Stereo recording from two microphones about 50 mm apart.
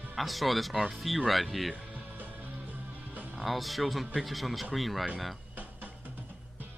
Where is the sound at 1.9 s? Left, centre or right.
Right.